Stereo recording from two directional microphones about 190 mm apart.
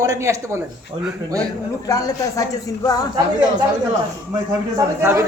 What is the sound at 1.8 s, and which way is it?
Speech, 20° left (ahead or behind).